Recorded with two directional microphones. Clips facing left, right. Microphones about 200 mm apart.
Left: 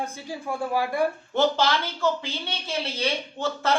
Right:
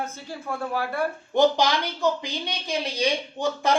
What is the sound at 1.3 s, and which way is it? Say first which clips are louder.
Speech: right 5 dB; 15° right (ahead or behind).